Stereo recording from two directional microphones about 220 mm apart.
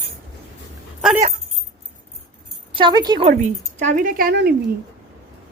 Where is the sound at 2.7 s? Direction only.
20° right (ahead or behind); by 4.5 s 45° right (ahead or behind).